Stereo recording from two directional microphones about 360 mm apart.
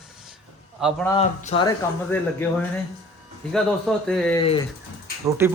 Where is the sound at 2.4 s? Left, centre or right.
Centre.